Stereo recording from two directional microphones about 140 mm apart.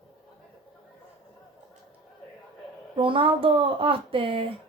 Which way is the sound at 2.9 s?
40° right (ahead or behind).